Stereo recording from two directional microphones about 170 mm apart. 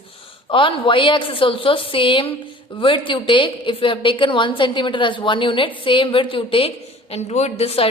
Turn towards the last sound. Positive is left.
turn(degrees=35)  # may be behind; listen again after turning